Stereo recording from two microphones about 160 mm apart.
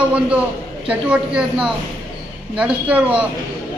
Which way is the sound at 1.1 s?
5° right (ahead or behind).